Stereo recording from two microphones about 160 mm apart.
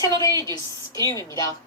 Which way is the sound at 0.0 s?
20° left (ahead or behind).